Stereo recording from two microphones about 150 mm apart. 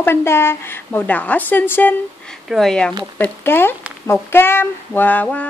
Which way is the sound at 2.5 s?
Centre (ahead or behind).